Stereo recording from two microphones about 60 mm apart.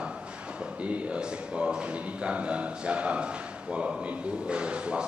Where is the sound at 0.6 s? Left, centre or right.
Right.